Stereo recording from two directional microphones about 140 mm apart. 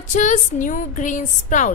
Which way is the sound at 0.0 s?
60° left (ahead or behind).